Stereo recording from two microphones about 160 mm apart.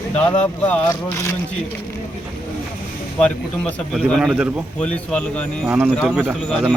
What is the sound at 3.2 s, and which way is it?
A man's voice, 5° left (ahead or behind).